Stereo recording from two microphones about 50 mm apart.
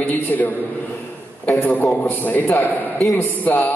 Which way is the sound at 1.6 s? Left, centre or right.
Left.